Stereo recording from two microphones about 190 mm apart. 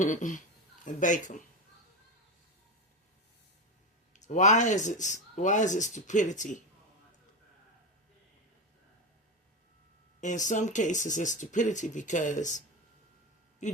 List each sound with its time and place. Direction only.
0.0 s speech: 40° left (ahead or behind)
4.1 s speech: 40° left (ahead or behind)
10.2 s speech: 40° left (ahead or behind)
13.6 s a sound: 40° left (ahead or behind)